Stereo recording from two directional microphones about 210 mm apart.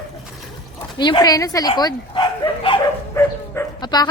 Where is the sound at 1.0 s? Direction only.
20° left (ahead or behind).